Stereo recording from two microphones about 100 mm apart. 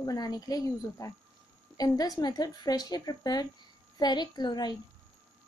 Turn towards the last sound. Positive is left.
turn(degrees=45)  # may be behind; listen again after turning